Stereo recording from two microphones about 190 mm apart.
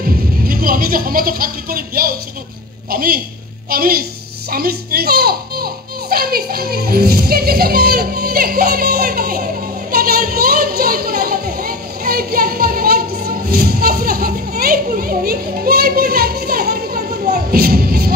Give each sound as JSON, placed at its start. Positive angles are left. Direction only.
{"t": 0.5, "sound": "a child's voice", "side_deg": -50}
{"t": 17.5, "sound": "music", "side_deg": -55}